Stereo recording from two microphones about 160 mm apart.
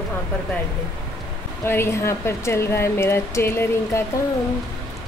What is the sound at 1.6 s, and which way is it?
Speech, 15° left (ahead or behind).